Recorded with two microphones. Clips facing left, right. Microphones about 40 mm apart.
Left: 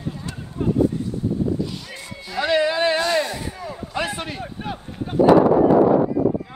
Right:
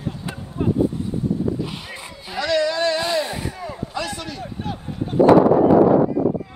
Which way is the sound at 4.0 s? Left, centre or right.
Left.